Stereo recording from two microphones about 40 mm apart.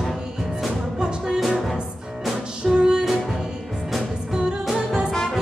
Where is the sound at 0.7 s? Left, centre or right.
Centre.